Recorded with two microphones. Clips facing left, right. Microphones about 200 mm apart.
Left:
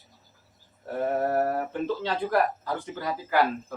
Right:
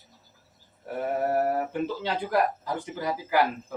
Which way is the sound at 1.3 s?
15° right (ahead or behind).